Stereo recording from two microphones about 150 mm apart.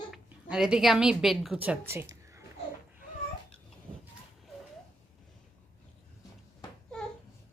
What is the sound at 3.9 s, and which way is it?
Vehicle, 40° right (ahead or behind).